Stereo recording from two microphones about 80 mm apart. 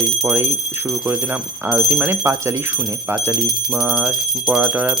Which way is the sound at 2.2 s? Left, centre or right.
Right.